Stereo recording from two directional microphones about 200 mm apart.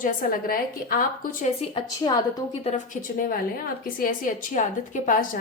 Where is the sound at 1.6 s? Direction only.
25° left (ahead or behind).